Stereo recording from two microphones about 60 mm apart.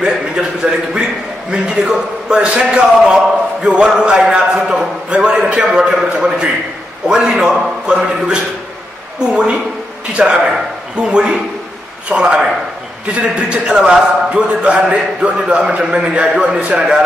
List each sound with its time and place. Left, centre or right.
0.0 s a man's voice: centre